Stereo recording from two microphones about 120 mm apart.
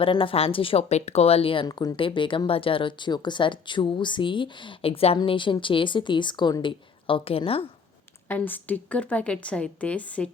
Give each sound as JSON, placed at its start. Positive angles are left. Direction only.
{"t": 0.0, "sound": "speech", "side_deg": 50}
{"t": 1.6, "sound": "speech", "side_deg": 30}
{"t": 2.0, "sound": "speech", "side_deg": 45}
{"t": 8.3, "sound": "a woman's voice", "side_deg": 15}